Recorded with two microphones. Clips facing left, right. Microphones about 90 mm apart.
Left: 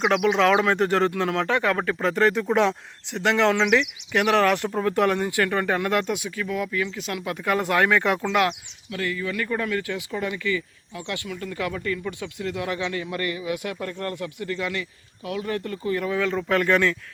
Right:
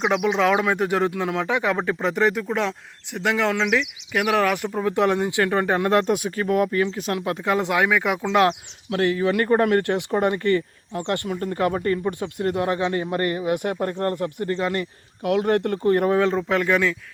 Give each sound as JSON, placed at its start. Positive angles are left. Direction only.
{"t": 0.3, "sound": "speech", "side_deg": -5}
{"t": 2.3, "sound": "speech", "side_deg": 0}
{"t": 4.9, "sound": "speech", "side_deg": -20}
{"t": 6.1, "sound": "speech", "side_deg": -45}
{"t": 7.5, "sound": "speech", "side_deg": -20}
{"t": 8.3, "sound": "speech", "side_deg": -30}
{"t": 8.9, "sound": "speech", "side_deg": -65}
{"t": 15.2, "sound": "speech", "side_deg": -65}
{"t": 16.4, "sound": "speech", "side_deg": -15}